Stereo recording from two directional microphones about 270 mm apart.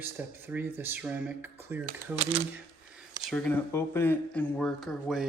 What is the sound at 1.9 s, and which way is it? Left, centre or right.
Speech, right.